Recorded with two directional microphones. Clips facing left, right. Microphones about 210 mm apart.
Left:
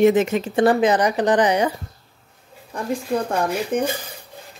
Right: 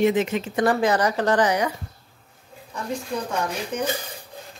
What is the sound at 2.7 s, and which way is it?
Speech, 55° left (ahead or behind).